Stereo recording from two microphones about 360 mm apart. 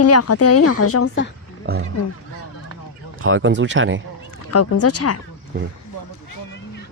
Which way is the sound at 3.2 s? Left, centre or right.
Right.